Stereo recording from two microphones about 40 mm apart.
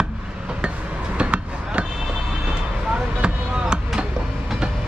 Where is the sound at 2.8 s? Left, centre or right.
Centre.